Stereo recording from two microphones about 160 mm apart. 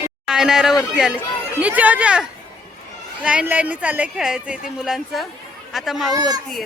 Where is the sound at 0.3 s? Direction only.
5° right (ahead or behind).